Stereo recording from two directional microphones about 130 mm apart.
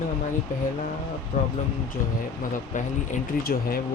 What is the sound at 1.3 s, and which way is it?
Speech, 60° left (ahead or behind).